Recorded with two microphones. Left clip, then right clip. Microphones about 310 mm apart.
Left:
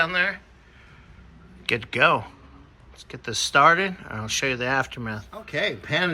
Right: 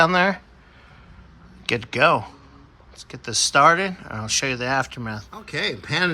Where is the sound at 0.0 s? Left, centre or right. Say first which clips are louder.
Right 5 dB; centre.